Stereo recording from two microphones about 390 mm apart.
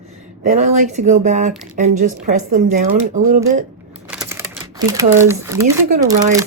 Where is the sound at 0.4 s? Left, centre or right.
Centre.